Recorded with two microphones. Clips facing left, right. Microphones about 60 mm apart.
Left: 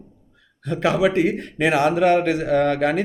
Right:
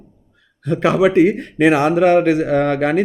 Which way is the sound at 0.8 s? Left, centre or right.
Right.